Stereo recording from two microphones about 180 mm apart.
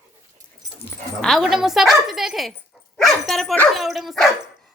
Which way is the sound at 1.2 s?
Centre (ahead or behind).